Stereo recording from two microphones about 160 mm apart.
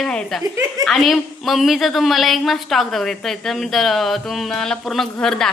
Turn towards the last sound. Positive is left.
turn(degrees=5)  # may be behind; listen again after turning